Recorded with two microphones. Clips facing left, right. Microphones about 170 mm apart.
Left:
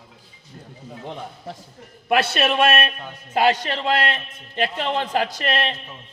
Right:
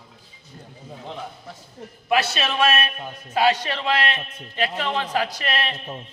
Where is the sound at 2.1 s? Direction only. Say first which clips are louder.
Left 3 dB; 55° left (ahead or behind).